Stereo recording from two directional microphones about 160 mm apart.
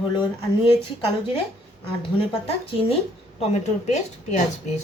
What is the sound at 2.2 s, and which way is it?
A woman's voice, 35° left (ahead or behind).